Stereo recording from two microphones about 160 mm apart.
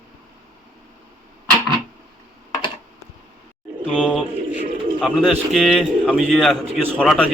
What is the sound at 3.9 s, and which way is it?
A man's voice, 5° left (ahead or behind).